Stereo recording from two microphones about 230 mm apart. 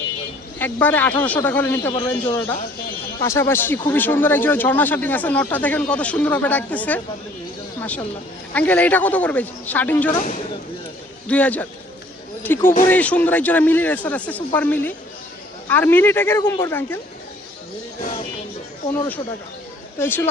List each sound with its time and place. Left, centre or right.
0.6 s a man's voice: centre
10.1 s speech: left
11.3 s a man's voice: centre
12.6 s speech: left
12.9 s a man's voice: centre
20.0 s a man's voice: centre